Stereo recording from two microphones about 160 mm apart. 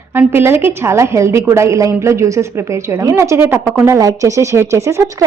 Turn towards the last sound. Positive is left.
turn(degrees=-20)  # may be behind; listen again after turning